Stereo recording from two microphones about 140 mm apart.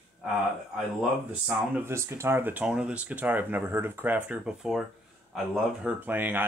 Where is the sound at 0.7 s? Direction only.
10° right (ahead or behind).